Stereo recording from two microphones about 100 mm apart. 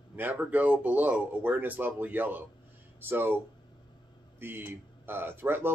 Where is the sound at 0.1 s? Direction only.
20° right (ahead or behind).